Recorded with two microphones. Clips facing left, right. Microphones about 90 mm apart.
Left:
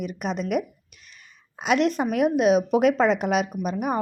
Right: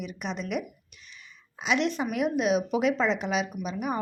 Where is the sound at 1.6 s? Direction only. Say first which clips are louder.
Left 5 dB; 45° left (ahead or behind).